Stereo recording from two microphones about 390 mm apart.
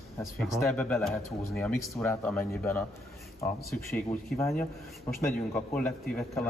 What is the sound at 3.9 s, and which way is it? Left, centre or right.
A man's voice, centre.